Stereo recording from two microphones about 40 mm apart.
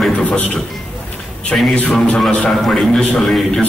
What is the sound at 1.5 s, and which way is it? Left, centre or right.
Speech, left.